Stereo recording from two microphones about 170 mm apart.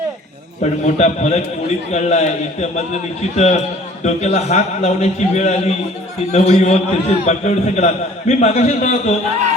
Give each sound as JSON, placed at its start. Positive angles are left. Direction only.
{"t": 0.6, "sound": "a man's voice", "side_deg": 45}